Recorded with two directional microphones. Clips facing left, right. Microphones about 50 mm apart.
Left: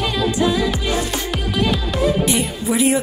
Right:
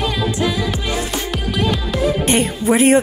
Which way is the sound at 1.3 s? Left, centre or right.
Centre.